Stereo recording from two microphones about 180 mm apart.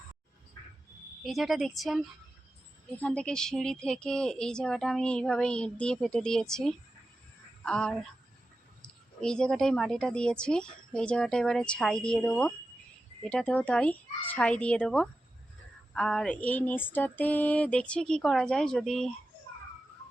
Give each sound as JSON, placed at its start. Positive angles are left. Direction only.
{"t": 1.2, "sound": "a woman's voice", "side_deg": 0}